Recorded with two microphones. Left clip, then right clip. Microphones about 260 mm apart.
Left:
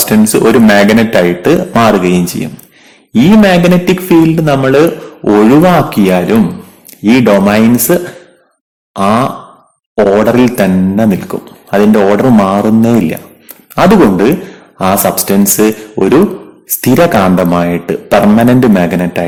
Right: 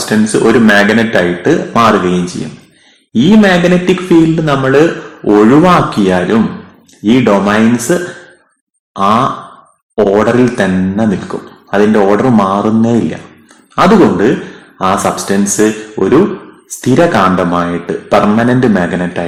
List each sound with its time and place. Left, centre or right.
0.0 s speech: left
8.9 s groan: left
9.9 s speech: left